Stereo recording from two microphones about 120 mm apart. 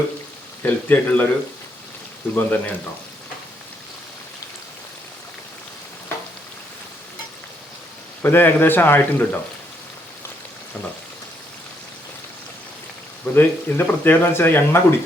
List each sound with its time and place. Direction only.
0.6 s a man's voice: 15° left (ahead or behind)
2.3 s a man's voice: 10° left (ahead or behind)
8.2 s a man's voice: 15° left (ahead or behind)
13.3 s speech: 20° left (ahead or behind)